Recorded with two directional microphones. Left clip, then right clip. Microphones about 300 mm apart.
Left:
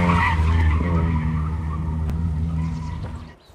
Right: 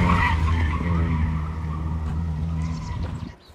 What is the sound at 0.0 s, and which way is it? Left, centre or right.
Vehicle, centre.